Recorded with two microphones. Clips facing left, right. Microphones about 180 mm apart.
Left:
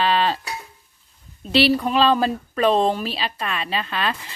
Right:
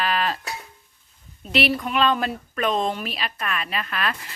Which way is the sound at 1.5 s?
30° left (ahead or behind).